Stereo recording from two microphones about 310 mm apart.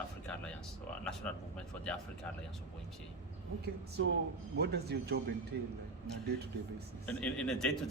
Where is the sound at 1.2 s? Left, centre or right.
Centre.